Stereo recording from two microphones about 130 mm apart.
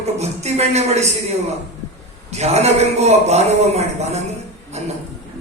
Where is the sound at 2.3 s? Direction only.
55° right (ahead or behind).